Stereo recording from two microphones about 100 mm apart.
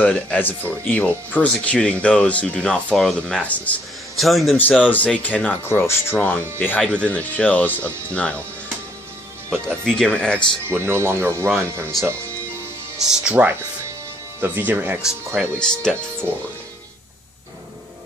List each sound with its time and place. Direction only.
0.0 s speech: 15° left (ahead or behind)
4.2 s a man's voice: centre (ahead or behind)
4.6 s speech: 15° left (ahead or behind)
5.6 s speech: 25° left (ahead or behind)
6.1 s speech: 15° left (ahead or behind)
9.8 s speech: 5° left (ahead or behind)
10.7 s speech: 25° right (ahead or behind)
13.1 s speech: 10° right (ahead or behind)
15.6 s speech: 10° left (ahead or behind)